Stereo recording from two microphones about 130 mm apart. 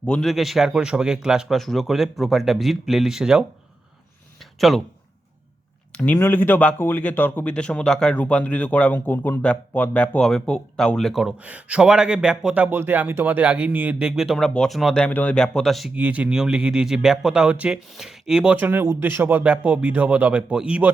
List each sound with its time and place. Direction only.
0.0 s speech: 5° left (ahead or behind)
4.4 s a sound: centre (ahead or behind)
5.9 s speech: 10° left (ahead or behind)
16.0 s speech: 10° right (ahead or behind)
18.5 s speech: 15° right (ahead or behind)